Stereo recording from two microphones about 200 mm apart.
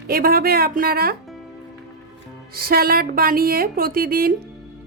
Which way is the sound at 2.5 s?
50° right (ahead or behind).